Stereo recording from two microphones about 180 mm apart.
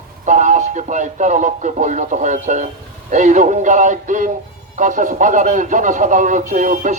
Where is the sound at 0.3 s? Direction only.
45° right (ahead or behind).